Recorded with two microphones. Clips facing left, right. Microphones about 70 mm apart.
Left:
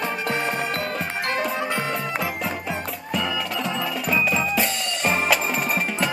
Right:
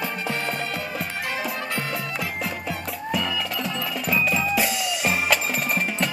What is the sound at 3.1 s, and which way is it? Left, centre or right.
Music, centre.